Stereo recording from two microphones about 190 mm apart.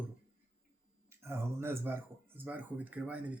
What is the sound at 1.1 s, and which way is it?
Speech, 10° right (ahead or behind).